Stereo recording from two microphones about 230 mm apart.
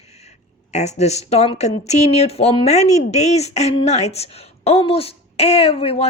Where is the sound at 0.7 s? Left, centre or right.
Left.